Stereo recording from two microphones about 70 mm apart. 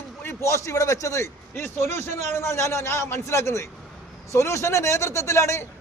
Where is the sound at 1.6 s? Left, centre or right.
Left.